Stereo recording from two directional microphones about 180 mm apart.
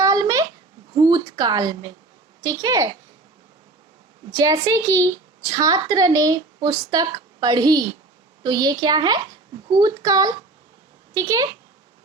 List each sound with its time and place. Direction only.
0.0 s a sound: 20° right (ahead or behind)
2.4 s a woman's voice: 20° right (ahead or behind)
4.3 s a woman's voice: 20° right (ahead or behind)